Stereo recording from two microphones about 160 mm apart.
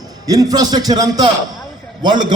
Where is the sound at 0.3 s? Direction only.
20° right (ahead or behind).